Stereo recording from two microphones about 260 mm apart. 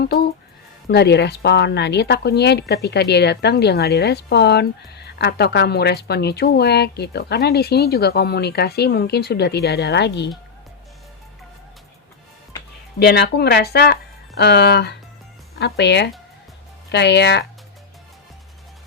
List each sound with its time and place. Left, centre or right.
0.9 s speech: left
13.0 s speech: left